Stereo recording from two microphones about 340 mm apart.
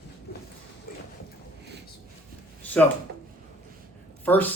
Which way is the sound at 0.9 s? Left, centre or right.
Left.